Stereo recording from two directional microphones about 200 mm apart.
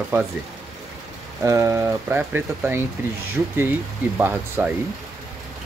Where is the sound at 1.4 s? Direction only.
15° right (ahead or behind).